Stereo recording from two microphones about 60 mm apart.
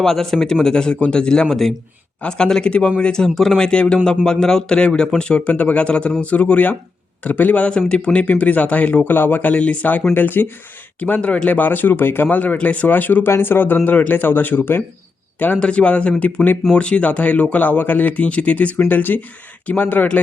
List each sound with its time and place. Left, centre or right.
0.0 s speech: centre
3.6 s speech: centre; by 14.8 s left
15.5 s speech: centre